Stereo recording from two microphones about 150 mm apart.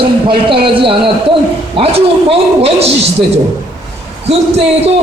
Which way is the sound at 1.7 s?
40° right (ahead or behind).